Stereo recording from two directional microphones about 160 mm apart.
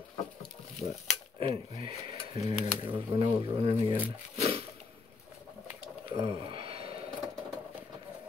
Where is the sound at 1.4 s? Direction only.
35° right (ahead or behind).